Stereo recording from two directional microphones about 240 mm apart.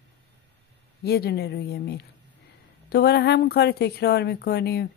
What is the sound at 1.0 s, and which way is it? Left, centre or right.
Speech, left.